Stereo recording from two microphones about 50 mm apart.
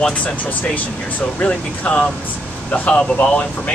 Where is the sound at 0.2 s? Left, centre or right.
Left.